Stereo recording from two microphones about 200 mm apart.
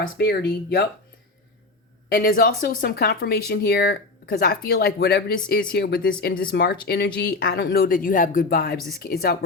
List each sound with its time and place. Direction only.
0.2 s speech: 55° left (ahead or behind)
2.1 s speech: 45° left (ahead or behind)